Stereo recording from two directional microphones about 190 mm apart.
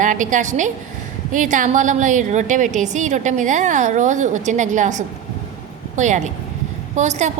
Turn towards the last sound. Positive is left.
turn(degrees=-40)  # may be behind; listen again after turning